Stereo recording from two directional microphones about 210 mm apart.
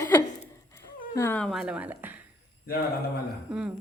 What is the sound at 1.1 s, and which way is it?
A woman's voice, 10° left (ahead or behind).